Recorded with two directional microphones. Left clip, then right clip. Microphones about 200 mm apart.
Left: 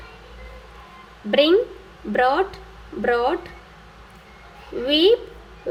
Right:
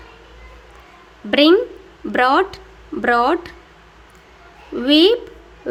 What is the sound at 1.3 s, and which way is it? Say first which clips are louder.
A woman's voice: right 3 dB; 50° right (ahead or behind).